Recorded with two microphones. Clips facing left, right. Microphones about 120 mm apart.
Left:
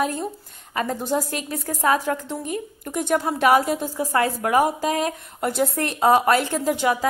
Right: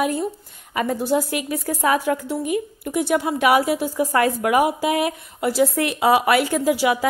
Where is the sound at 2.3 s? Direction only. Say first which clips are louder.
Right 5 dB; 5° right (ahead or behind).